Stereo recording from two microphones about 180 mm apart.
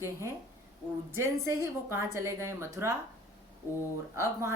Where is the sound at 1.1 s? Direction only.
15° right (ahead or behind).